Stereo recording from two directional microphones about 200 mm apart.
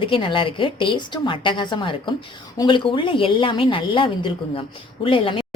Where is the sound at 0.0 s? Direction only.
25° left (ahead or behind).